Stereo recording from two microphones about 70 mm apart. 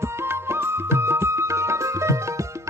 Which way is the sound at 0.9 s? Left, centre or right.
Right.